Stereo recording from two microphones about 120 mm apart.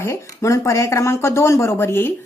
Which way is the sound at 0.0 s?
25° left (ahead or behind).